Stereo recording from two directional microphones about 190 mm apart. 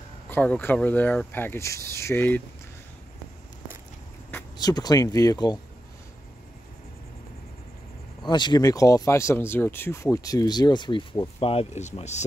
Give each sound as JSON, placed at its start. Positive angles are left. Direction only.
{"t": 0.3, "sound": "speech", "side_deg": 10}
{"t": 4.3, "sound": "speech", "side_deg": 15}
{"t": 8.2, "sound": "speech", "side_deg": 25}